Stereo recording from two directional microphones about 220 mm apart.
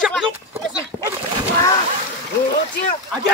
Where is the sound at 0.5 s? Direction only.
15° right (ahead or behind).